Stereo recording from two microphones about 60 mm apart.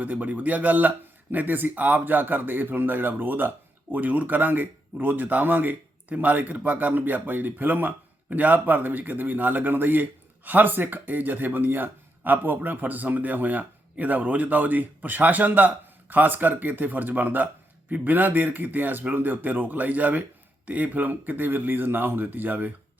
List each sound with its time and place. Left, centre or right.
0.0 s a man's voice: right